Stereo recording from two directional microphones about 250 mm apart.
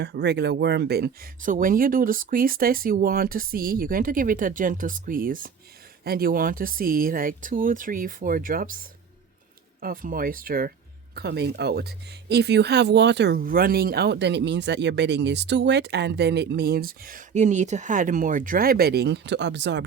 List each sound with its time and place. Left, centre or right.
0.0 s speech: right